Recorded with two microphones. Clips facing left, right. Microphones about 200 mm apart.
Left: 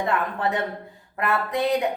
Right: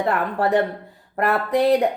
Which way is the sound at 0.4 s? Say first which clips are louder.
Right 6 dB; 35° right (ahead or behind).